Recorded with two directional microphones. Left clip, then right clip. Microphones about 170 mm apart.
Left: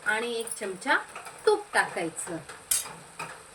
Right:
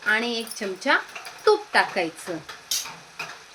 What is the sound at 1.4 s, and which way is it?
Speech, 50° right (ahead or behind).